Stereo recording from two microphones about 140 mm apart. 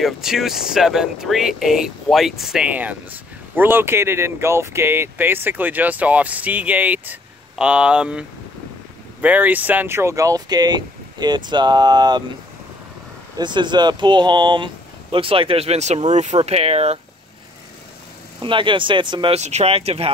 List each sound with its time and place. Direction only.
0.0 s speech: 5° right (ahead or behind); by 12.2 s 30° right (ahead or behind)
13.4 s speech: 30° right (ahead or behind); by 17.0 s 50° right (ahead or behind)
18.4 s speech: 35° right (ahead or behind)
19.3 s speech: 50° right (ahead or behind)